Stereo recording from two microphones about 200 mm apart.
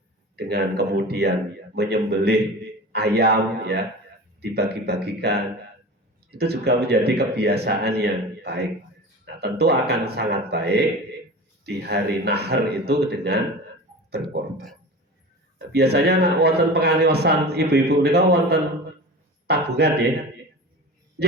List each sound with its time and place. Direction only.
0.3 s a man's voice: 55° right (ahead or behind)
15.5 s a man's voice: 55° right (ahead or behind)